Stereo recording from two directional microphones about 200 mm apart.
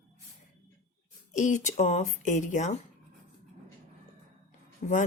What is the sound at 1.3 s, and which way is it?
Speech, 35° left (ahead or behind).